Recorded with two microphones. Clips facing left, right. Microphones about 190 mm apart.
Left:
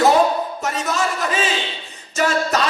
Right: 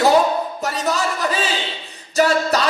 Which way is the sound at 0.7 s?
35° right (ahead or behind).